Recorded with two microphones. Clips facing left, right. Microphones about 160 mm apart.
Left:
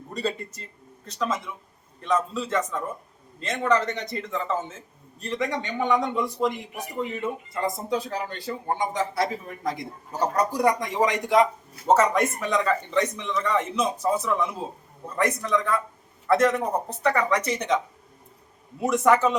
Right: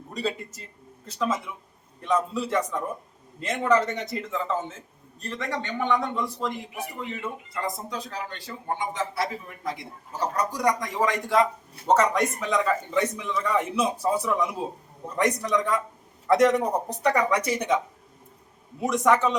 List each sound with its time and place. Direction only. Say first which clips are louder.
0.1 s a man's voice: left 1 dB; centre (ahead or behind)
5.2 s a man's voice: left 3 dB; 10° left (ahead or behind)
7.5 s a man's voice: left 5 dB; 25° left (ahead or behind)
11.9 s a man's voice: left 1 dB; 5° left (ahead or behind)
18.8 s a man's voice: left 2 dB; centre (ahead or behind)